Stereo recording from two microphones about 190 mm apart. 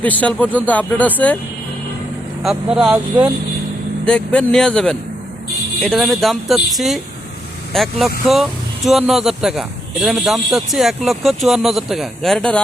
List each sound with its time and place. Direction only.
0.0 s speech: 5° left (ahead or behind)
2.4 s speech: 5° right (ahead or behind)